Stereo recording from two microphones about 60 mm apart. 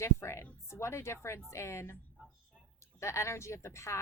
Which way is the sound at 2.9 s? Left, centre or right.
Left.